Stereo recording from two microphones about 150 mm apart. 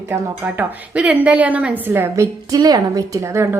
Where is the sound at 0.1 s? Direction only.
10° right (ahead or behind).